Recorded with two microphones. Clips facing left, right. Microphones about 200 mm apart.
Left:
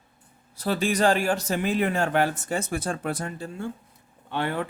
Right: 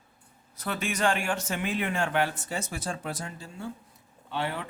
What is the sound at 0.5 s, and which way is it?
A man's voice, 30° left (ahead or behind).